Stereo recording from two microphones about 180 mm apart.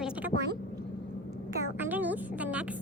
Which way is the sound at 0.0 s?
10° right (ahead or behind).